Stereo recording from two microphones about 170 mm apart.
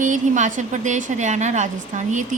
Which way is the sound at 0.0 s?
45° right (ahead or behind).